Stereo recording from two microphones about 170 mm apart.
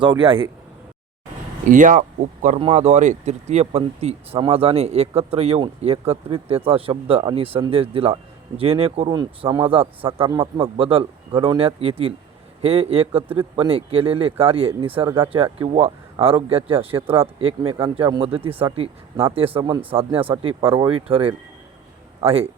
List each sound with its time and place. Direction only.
0.0 s speech: 30° right (ahead or behind)
1.6 s speech: 50° right (ahead or behind)